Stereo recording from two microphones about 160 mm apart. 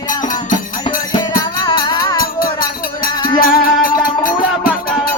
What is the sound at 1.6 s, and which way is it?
Music, 30° left (ahead or behind).